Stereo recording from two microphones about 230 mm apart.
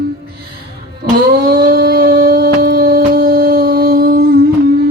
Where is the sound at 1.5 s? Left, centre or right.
Right.